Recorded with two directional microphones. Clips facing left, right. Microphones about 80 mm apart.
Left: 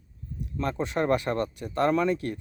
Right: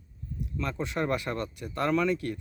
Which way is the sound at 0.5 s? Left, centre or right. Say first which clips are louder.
Left 4 dB; left.